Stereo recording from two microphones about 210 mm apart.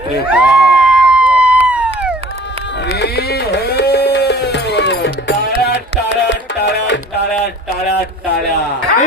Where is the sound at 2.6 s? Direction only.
55° left (ahead or behind).